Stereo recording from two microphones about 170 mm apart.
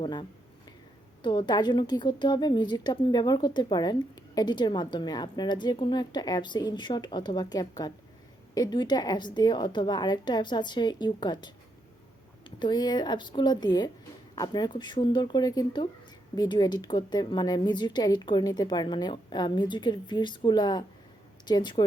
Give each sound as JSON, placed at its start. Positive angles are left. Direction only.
{"t": 0.0, "sound": "a woman's voice", "side_deg": 30}